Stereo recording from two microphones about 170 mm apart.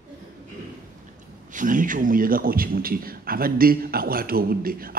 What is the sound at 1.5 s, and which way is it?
Speech, 50° right (ahead or behind).